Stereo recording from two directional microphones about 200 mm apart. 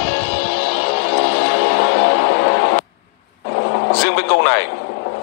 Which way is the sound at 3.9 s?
60° left (ahead or behind).